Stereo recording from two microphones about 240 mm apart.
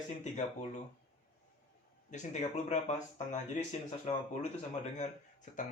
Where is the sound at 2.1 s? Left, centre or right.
Left.